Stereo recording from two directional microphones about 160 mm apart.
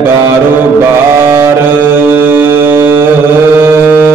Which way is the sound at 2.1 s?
15° right (ahead or behind).